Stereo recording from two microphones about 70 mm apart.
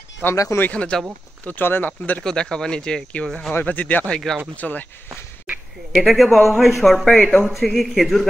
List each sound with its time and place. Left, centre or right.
0.2 s speech: left
1.4 s speech: left
2.2 s speech: centre
3.6 s speech: left
5.9 s speech: centre
7.2 s speech: centre
7.4 s speech: centre